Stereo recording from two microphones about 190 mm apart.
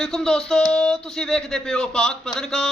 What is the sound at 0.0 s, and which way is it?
Speech, centre (ahead or behind).